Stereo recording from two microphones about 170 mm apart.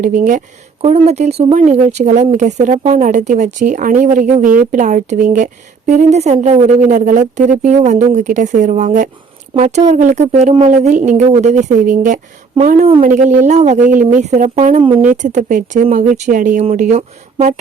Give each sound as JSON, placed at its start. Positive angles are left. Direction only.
{"t": 0.0, "sound": "speech", "side_deg": -50}
{"t": 14.8, "sound": "speech", "side_deg": -30}
{"t": 15.1, "sound": "speech", "side_deg": -45}